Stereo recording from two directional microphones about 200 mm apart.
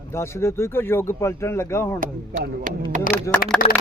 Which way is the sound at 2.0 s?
45° right (ahead or behind).